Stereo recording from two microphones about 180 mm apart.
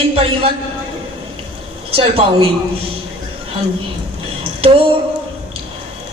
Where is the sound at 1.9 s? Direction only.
30° right (ahead or behind).